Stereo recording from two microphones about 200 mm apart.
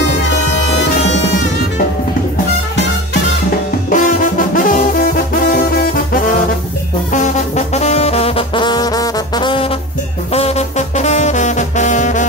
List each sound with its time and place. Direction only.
3.9 s music: 40° left (ahead or behind)
7.1 s music: 40° left (ahead or behind)